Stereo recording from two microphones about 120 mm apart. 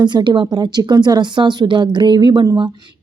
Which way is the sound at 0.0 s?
35° right (ahead or behind).